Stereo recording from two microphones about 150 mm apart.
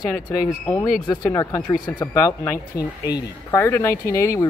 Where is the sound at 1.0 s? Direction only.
25° left (ahead or behind).